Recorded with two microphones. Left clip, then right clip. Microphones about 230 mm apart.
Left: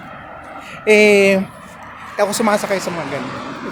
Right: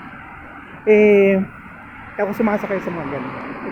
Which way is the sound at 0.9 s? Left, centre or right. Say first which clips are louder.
Left 2 dB; left.